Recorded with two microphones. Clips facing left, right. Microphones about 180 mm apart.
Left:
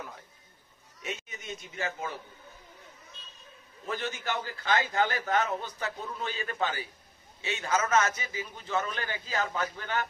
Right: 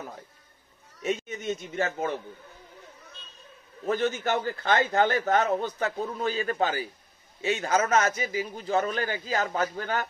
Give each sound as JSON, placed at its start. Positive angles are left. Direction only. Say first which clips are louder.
{"t": 1.0, "sound": "a man's voice", "louder": "right 10 dB", "side_deg": -40}
{"t": 3.8, "sound": "a man's voice", "louder": "right 8 dB", "side_deg": -50}